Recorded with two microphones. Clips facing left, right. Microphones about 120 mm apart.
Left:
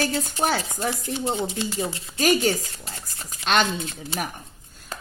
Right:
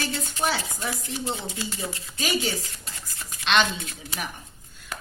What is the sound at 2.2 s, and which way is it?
Speech, 45° left (ahead or behind).